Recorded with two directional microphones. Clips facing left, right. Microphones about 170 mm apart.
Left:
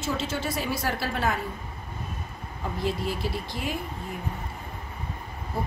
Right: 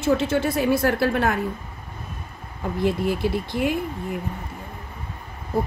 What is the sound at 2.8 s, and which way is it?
Speech, 55° right (ahead or behind).